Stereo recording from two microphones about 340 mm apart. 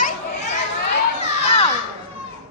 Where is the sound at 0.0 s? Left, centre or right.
Centre.